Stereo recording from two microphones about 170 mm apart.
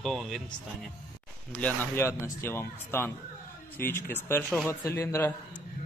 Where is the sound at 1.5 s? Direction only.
10° left (ahead or behind).